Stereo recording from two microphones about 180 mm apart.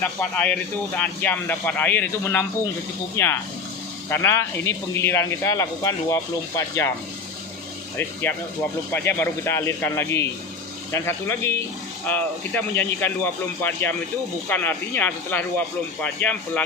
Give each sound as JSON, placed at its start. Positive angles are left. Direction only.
{"t": 0.0, "sound": "speech", "side_deg": 10}
{"t": 7.9, "sound": "speech", "side_deg": 10}